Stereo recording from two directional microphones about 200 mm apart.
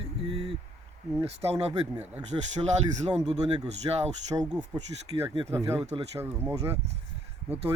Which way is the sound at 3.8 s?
25° right (ahead or behind).